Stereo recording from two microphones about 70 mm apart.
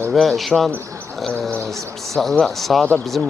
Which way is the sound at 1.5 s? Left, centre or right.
Right.